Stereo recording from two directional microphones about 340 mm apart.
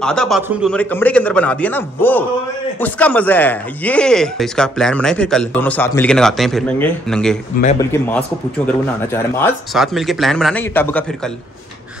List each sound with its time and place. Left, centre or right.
0.0 s speech: centre
8.6 s speech: centre